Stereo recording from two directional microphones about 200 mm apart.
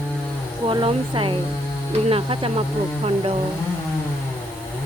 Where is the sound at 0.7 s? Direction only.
25° right (ahead or behind).